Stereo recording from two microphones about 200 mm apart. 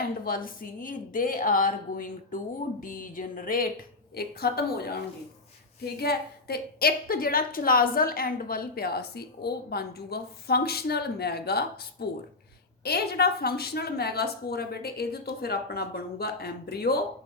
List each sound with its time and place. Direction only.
0.3 s a woman's voice: 45° left (ahead or behind)